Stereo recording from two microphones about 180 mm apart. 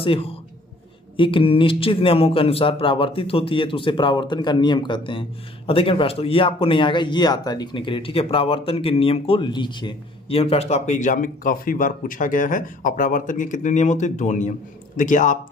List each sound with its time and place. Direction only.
0.0 s a man's voice: 30° left (ahead or behind)